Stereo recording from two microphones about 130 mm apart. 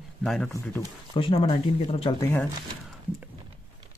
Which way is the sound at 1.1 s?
45° left (ahead or behind).